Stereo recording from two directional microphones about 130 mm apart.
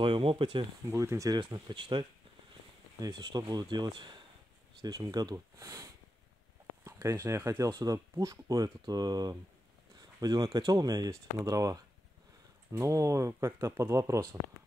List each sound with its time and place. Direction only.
0.0 s speech: 45° right (ahead or behind)
0.8 s speech: 20° right (ahead or behind)
1.4 s speech: 40° right (ahead or behind)